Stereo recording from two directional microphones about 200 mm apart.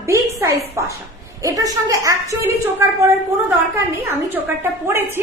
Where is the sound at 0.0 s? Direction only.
15° right (ahead or behind).